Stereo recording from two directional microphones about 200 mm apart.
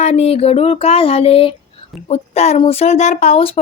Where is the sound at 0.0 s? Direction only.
30° left (ahead or behind).